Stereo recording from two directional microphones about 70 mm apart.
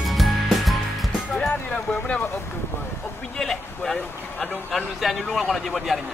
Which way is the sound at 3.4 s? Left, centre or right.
Centre.